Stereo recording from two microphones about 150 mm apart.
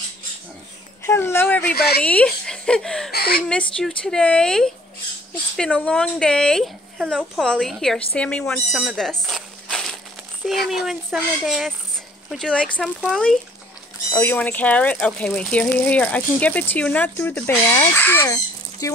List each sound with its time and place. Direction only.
1.0 s speech: 15° left (ahead or behind)
1.8 s speech: 90° left
2.0 s speech: 5° left (ahead or behind)
3.1 s speech: 90° left
3.4 s speech: 5° left (ahead or behind)
9.2 s mechanisms: centre (ahead or behind)
10.4 s speech: centre (ahead or behind)
14.1 s speech: 15° left (ahead or behind)